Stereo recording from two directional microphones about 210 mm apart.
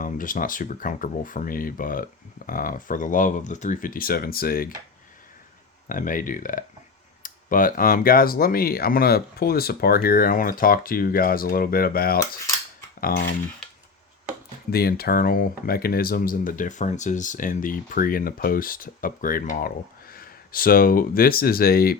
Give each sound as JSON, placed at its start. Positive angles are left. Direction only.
{"t": 0.0, "sound": "speech", "side_deg": 40}
{"t": 5.9, "sound": "speech", "side_deg": 40}
{"t": 14.7, "sound": "speech", "side_deg": 45}